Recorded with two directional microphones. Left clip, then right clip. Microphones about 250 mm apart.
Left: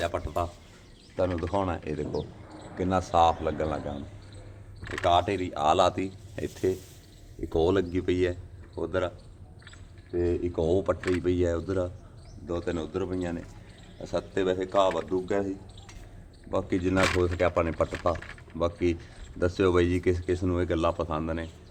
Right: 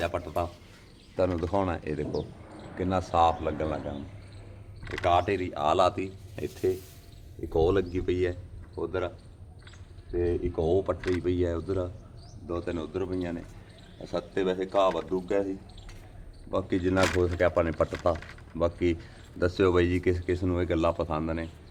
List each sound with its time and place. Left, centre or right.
0.0 s speech: centre
1.1 s speech: centre
1.8 s speech: centre
2.7 s speech: centre
5.0 s speech: centre; by 9.1 s left
10.2 s speech: left
16.5 s speech: centre
17.9 s speech: centre